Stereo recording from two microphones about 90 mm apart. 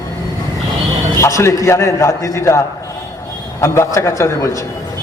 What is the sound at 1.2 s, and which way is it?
A man's voice, 35° left (ahead or behind).